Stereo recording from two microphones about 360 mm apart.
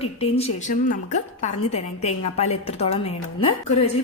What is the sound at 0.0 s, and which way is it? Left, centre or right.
A woman's voice, centre.